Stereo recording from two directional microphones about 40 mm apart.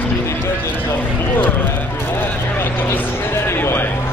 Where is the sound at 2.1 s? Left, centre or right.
Left.